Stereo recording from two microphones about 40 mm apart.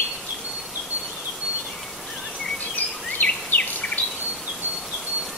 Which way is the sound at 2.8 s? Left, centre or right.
Left.